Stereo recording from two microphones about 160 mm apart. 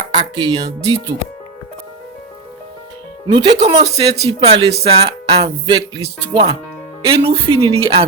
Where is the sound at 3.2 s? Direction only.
30° right (ahead or behind).